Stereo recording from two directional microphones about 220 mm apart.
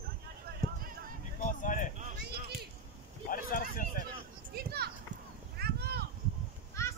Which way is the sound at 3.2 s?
40° left (ahead or behind).